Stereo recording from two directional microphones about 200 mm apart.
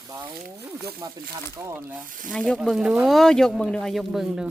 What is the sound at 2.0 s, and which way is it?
Speech, 40° right (ahead or behind).